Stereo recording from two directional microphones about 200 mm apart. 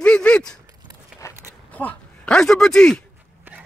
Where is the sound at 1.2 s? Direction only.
15° left (ahead or behind).